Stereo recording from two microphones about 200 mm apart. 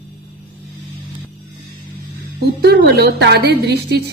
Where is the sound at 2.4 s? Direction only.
55° right (ahead or behind).